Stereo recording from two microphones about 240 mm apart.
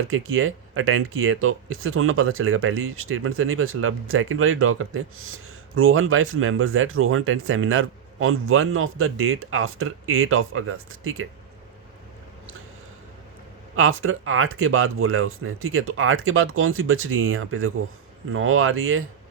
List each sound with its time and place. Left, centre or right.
0.1 s speech: right
13.7 s speech: right